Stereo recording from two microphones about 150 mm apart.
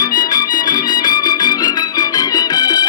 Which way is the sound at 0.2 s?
25° left (ahead or behind).